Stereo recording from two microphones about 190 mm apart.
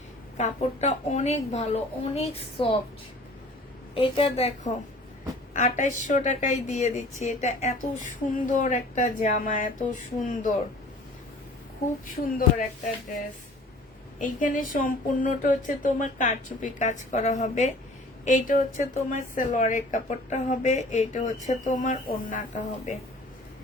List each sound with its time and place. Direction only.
0.3 s a woman's voice: 35° left (ahead or behind)
3.9 s a woman's voice: 30° left (ahead or behind)
5.5 s a woman's voice: 40° left (ahead or behind)
14.2 s a woman's voice: 45° left (ahead or behind)